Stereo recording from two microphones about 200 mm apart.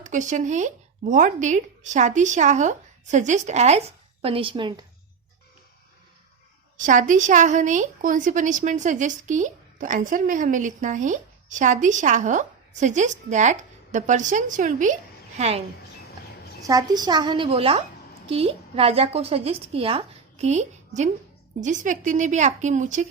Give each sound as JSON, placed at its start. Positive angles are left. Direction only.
{"t": 0.0, "sound": "speech", "side_deg": -40}
{"t": 6.7, "sound": "a woman's voice", "side_deg": -40}
{"t": 16.6, "sound": "a woman's voice", "side_deg": -20}